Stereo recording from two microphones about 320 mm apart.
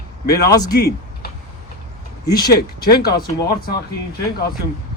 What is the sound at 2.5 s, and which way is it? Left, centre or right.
Speech, left.